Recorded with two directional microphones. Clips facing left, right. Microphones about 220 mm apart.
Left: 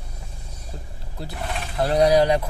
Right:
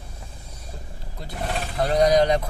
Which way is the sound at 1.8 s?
5° left (ahead or behind).